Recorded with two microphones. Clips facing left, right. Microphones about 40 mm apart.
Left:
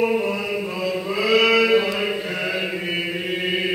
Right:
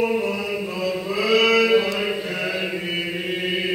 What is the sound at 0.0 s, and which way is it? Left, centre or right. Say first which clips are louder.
Chant: left 1 dB; centre.